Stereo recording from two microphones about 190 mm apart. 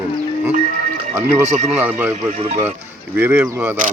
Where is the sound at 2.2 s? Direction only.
40° right (ahead or behind).